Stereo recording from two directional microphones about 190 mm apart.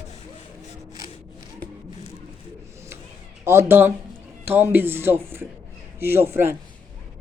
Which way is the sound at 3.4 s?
10° right (ahead or behind).